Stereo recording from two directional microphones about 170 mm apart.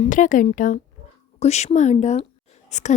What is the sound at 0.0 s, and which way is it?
A woman's voice, 50° left (ahead or behind).